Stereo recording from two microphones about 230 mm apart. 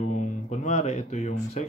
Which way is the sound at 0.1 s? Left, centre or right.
Left.